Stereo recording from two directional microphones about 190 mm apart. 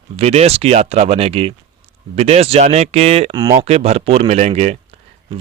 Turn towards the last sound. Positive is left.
turn(degrees=-35)  # may be behind; listen again after turning